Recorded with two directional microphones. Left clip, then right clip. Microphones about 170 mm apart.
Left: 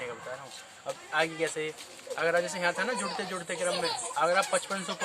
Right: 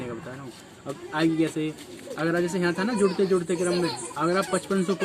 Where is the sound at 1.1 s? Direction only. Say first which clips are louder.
Right 5 dB; 30° left (ahead or behind).